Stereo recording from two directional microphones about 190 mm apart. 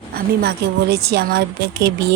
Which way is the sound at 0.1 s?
55° right (ahead or behind).